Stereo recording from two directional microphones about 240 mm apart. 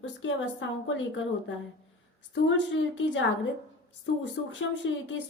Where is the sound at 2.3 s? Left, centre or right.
Left.